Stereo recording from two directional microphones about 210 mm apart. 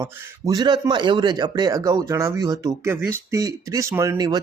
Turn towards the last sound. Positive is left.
turn(degrees=-20)  # may be behind; listen again after turning